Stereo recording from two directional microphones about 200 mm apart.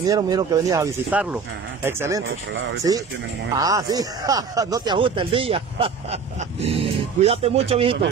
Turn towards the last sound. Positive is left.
turn(degrees=-30)  # may be behind; listen again after turning